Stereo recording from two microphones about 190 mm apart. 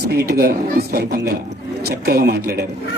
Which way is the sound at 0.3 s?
50° right (ahead or behind).